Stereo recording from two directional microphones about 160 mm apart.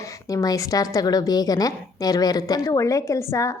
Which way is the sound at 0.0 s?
20° left (ahead or behind).